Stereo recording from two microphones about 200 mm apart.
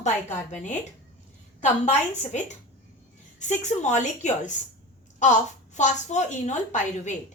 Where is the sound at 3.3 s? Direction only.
35° left (ahead or behind).